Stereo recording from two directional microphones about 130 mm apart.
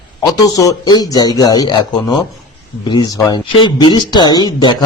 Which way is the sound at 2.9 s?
30° left (ahead or behind).